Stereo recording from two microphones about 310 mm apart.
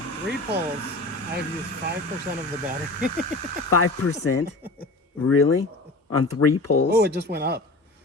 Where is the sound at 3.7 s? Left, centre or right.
Left.